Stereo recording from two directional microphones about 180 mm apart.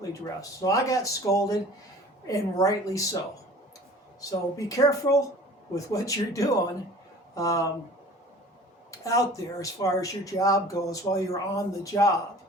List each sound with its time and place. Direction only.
0.6 s speech: 20° left (ahead or behind)
4.2 s speech: 20° left (ahead or behind)
8.9 s speech: 20° left (ahead or behind)